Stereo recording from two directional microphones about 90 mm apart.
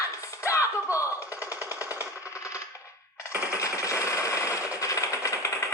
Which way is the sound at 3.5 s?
35° left (ahead or behind).